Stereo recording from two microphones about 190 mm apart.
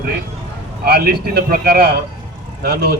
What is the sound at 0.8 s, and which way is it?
A man's voice, 55° right (ahead or behind).